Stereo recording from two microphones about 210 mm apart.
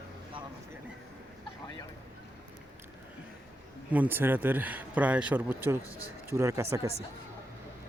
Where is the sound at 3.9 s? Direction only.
10° right (ahead or behind).